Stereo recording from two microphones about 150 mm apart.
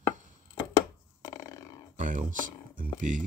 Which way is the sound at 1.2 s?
30° left (ahead or behind).